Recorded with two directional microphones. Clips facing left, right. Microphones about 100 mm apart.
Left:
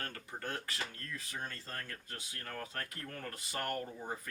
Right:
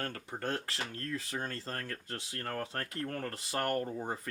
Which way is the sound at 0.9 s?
70° right (ahead or behind).